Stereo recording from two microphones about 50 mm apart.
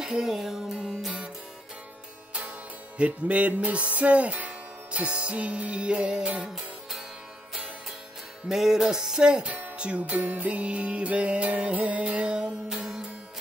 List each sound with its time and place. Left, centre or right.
0.0 s music: centre
3.0 s music: right; by 7.1 s centre
8.5 s music: centre